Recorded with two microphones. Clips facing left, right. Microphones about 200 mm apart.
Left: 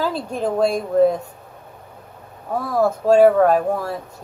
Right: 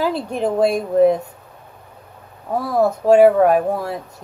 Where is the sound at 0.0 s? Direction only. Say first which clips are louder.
Right 2 dB; 20° right (ahead or behind).